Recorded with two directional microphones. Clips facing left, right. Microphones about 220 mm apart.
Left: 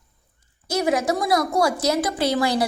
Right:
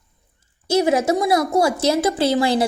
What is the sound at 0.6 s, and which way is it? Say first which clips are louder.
A woman's voice: right 4 dB; 25° right (ahead or behind).